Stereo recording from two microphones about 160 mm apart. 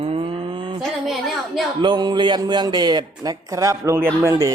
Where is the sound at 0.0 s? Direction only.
35° right (ahead or behind).